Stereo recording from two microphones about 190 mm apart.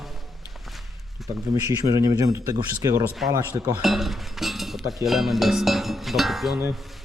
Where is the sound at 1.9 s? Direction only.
20° right (ahead or behind).